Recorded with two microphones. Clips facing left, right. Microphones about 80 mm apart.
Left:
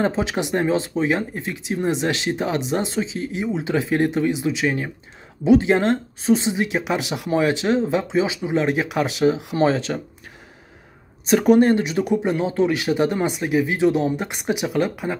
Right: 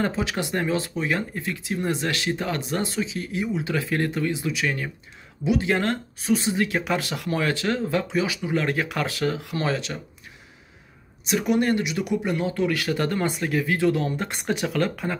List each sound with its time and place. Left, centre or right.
0.0 s speech: left
11.2 s speech: left; by 15.1 s centre